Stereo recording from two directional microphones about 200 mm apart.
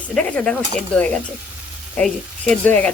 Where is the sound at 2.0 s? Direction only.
5° left (ahead or behind).